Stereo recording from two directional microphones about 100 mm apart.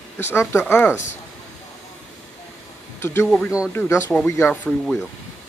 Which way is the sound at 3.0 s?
25° left (ahead or behind).